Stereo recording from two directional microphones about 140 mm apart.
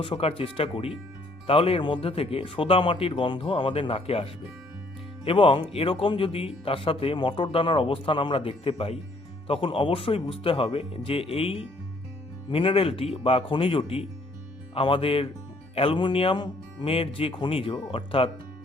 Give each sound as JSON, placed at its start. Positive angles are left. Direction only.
{"t": 0.0, "sound": "speech", "side_deg": 45}